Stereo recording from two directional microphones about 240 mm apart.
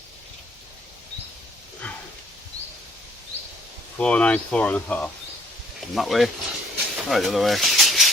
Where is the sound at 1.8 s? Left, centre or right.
Centre.